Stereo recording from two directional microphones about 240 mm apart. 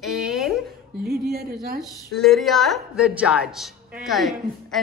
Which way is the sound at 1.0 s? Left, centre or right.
Right.